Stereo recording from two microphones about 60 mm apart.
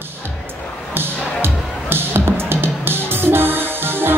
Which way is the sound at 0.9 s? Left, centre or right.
Right.